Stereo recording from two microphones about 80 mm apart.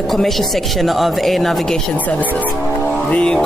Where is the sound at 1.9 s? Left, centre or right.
Centre.